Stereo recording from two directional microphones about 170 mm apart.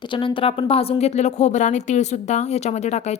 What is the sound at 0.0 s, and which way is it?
A woman's voice, 30° left (ahead or behind).